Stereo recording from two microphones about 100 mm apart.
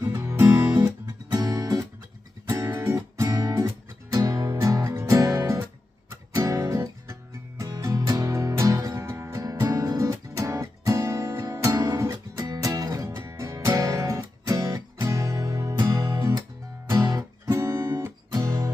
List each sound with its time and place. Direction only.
0.0 s music: 25° right (ahead or behind)
1.3 s music: 40° right (ahead or behind)
2.6 s music: 20° right (ahead or behind)
17.4 s music: 30° right (ahead or behind)